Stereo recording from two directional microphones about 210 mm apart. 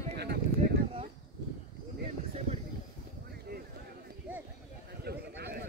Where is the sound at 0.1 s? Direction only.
50° right (ahead or behind).